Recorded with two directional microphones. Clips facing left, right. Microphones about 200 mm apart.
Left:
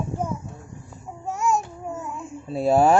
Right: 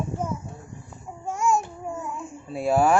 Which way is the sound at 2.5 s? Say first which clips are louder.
Left 3 dB; 25° left (ahead or behind).